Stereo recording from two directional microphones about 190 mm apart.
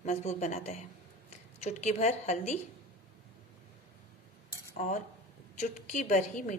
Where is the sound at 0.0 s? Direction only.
40° left (ahead or behind).